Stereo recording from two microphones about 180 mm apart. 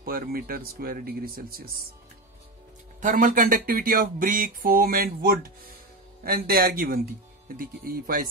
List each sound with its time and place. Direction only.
0.0 s speech: 55° right (ahead or behind)
3.0 s speech: 45° right (ahead or behind)